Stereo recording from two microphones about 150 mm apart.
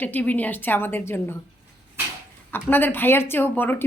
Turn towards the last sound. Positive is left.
turn(degrees=15)  # may be behind; listen again after turning